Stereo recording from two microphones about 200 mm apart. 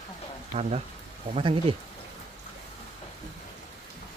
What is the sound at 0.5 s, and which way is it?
Speech, 30° right (ahead or behind).